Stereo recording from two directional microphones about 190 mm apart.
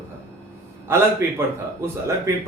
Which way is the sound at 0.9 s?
10° right (ahead or behind).